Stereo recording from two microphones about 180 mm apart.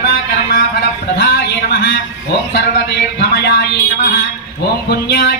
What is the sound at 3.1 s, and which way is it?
Speech, 65° left (ahead or behind).